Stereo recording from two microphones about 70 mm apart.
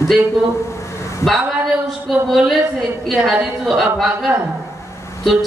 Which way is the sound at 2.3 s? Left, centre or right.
Centre.